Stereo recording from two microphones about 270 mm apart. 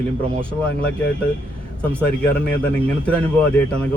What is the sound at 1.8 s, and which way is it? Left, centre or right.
A man's voice, centre.